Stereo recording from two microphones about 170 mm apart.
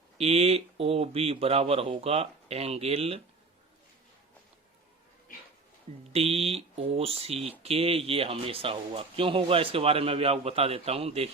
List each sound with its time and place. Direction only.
0.2 s speech: 35° right (ahead or behind)
6.1 s speech: 35° right (ahead or behind)